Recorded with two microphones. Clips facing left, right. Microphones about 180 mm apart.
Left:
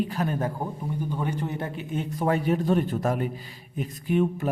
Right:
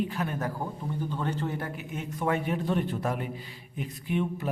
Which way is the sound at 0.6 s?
15° left (ahead or behind).